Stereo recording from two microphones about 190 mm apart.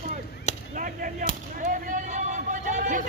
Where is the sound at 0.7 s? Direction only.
45° right (ahead or behind).